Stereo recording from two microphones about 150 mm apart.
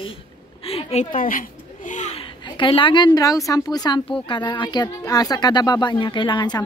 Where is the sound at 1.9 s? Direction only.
50° left (ahead or behind).